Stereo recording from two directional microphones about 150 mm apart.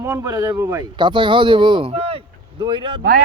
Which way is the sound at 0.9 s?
30° right (ahead or behind).